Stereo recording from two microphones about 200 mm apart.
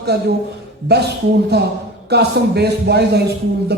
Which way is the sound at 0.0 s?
55° right (ahead or behind).